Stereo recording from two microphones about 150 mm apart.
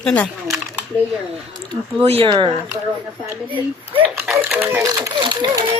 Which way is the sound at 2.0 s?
40° right (ahead or behind).